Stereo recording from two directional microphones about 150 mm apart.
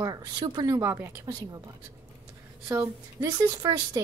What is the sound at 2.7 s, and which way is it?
A woman's voice, 20° right (ahead or behind).